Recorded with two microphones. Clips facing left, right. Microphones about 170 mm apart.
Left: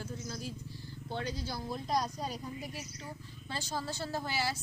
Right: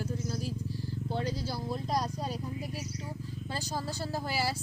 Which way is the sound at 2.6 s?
35° right (ahead or behind).